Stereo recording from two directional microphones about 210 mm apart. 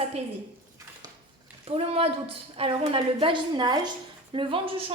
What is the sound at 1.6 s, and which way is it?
A woman's voice, 30° right (ahead or behind).